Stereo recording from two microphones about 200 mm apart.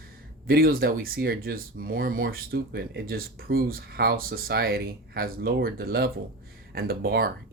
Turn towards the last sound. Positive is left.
turn(degrees=-50)  # may be behind; listen again after turning